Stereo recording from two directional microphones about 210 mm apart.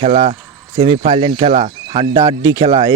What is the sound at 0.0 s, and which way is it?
Speech, 30° right (ahead or behind).